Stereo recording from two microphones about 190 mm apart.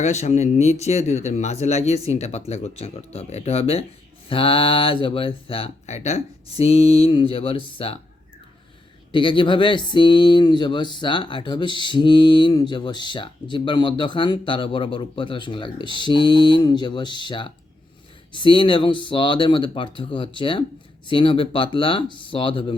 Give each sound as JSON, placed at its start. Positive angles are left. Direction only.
{"t": 0.0, "sound": "speech", "side_deg": 35}
{"t": 9.1, "sound": "speech", "side_deg": 25}